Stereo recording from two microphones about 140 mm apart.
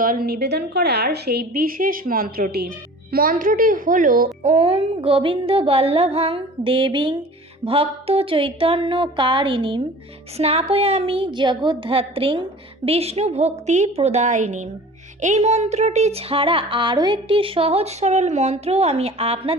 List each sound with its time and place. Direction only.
0.0 s a woman's voice: 90° right
1.5 s a woman's voice: 90° right
4.4 s a sound: 45° right (ahead or behind)
10.3 s speech: 45° right (ahead or behind)